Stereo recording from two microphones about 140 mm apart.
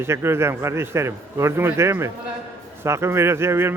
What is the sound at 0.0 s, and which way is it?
A man's voice, 15° right (ahead or behind).